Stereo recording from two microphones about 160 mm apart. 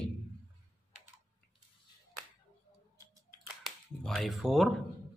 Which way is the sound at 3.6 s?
5° left (ahead or behind).